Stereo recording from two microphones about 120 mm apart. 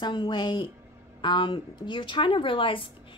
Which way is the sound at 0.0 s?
40° left (ahead or behind).